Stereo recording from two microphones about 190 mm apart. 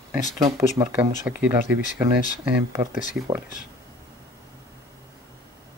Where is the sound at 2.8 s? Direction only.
20° right (ahead or behind).